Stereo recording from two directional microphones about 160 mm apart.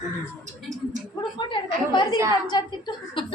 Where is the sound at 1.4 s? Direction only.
30° left (ahead or behind).